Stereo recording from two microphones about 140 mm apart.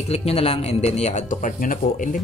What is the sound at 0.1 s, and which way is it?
Speech, 45° left (ahead or behind).